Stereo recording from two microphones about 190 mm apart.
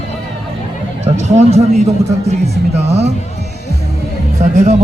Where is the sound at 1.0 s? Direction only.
35° right (ahead or behind).